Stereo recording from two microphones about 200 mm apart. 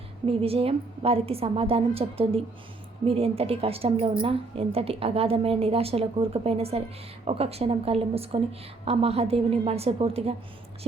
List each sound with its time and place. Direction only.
0.3 s a woman's voice: 30° right (ahead or behind)